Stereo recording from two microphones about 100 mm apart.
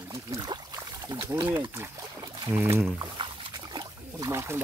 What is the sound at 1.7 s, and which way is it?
Speech, 25° right (ahead or behind).